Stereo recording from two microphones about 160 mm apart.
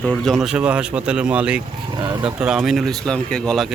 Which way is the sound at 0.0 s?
Centre (ahead or behind).